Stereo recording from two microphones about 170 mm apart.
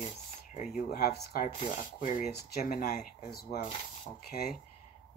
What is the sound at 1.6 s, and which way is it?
Speech, 50° left (ahead or behind).